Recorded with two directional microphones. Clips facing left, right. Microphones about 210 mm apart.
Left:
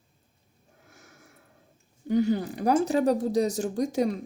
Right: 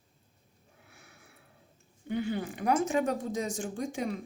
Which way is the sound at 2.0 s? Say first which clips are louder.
Left 8 dB; 40° left (ahead or behind).